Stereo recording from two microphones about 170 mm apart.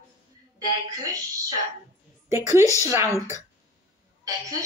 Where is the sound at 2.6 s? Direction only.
15° left (ahead or behind).